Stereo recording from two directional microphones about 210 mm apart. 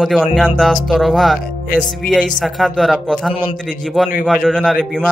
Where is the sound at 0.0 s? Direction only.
Centre (ahead or behind).